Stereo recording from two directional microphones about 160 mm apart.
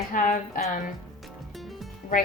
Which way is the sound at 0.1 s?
55° left (ahead or behind).